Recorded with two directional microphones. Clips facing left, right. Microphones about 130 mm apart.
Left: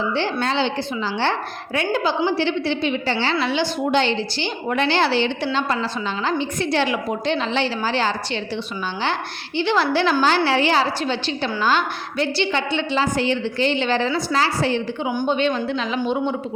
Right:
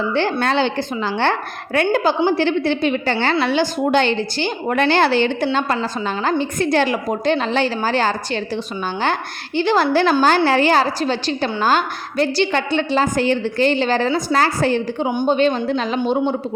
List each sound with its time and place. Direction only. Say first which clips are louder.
0.1 s a woman's voice: right 4 dB; 50° right (ahead or behind)
9.6 s a woman's voice: right 3 dB; 45° right (ahead or behind)